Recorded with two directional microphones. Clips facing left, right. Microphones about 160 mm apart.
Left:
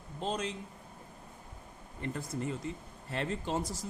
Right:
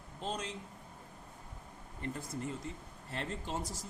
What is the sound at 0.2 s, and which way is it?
Speech, 90° left.